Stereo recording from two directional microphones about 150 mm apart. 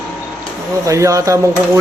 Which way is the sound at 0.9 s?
20° right (ahead or behind).